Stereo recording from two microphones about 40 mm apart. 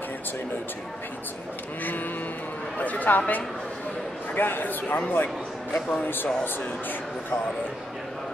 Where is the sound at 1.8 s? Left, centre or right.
Left.